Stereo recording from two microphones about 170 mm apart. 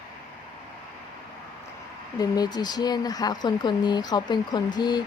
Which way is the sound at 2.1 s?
20° left (ahead or behind).